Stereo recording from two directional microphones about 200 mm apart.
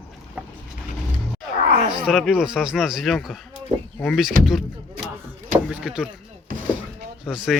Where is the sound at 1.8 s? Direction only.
25° right (ahead or behind).